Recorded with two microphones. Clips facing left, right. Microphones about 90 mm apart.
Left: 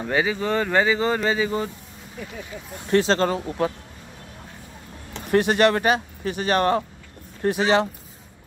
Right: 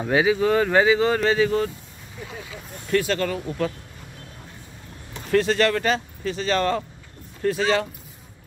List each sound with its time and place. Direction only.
0.0 s speech: 5° right (ahead or behind); by 1.7 s 10° left (ahead or behind)
2.9 s speech: 30° left (ahead or behind)
5.3 s speech: 20° left (ahead or behind)